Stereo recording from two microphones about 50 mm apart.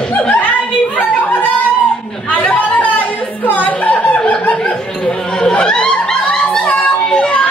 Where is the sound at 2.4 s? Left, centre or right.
Left.